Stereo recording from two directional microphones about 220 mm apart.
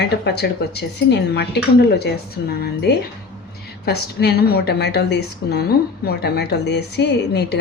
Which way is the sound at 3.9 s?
45° left (ahead or behind).